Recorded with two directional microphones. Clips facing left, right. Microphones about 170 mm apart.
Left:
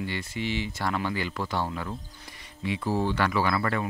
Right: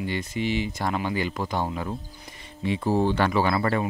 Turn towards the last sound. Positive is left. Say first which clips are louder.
# right 3 dB
turn(degrees=-25)  # may be behind; listen again after turning